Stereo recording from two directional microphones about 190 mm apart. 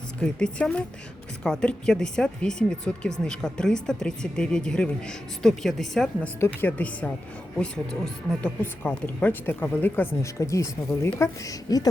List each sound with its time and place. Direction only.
0.2 s speech: 5° left (ahead or behind)
8.3 s a woman's voice: 5° left (ahead or behind)